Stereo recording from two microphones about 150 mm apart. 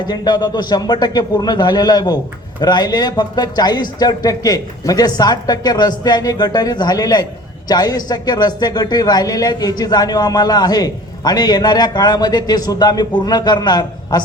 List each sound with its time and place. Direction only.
0.0 s a man's voice: 25° left (ahead or behind)